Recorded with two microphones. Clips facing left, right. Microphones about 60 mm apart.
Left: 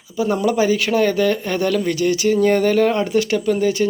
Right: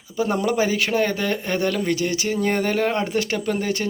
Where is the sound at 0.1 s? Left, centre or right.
Right.